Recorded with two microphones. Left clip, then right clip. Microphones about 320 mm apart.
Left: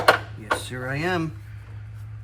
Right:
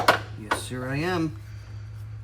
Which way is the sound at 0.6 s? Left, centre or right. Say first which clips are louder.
Left 2 dB; centre.